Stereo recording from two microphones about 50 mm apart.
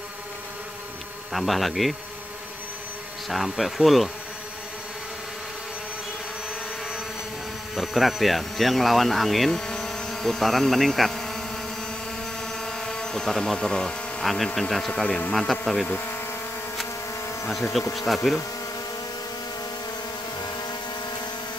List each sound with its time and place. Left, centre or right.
1.3 s speech: centre
3.5 s speech: centre
7.7 s speech: centre
9.6 s a sound: centre
12.5 s a sound: centre
14.2 s speech: centre
15.0 s speech: centre
17.9 s speech: centre